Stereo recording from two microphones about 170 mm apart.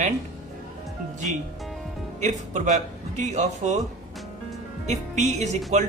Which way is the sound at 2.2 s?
45° right (ahead or behind).